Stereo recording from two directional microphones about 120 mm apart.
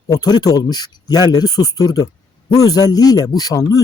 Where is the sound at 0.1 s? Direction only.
35° left (ahead or behind).